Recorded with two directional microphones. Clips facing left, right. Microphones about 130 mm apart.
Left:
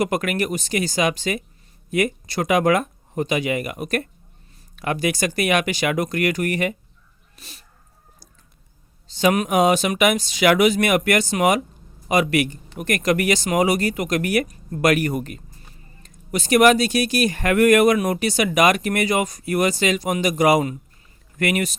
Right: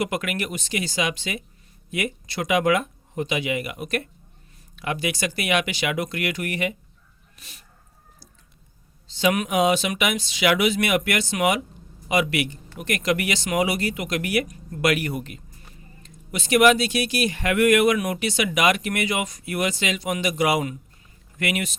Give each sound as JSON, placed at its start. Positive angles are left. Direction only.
{"t": 0.0, "sound": "speech", "side_deg": 45}
{"t": 7.3, "sound": "speech", "side_deg": 35}
{"t": 9.0, "sound": "speech", "side_deg": 45}